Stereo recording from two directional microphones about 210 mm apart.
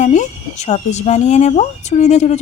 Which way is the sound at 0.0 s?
35° left (ahead or behind).